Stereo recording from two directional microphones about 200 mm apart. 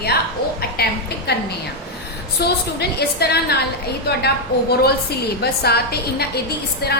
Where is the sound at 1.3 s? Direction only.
55° left (ahead or behind).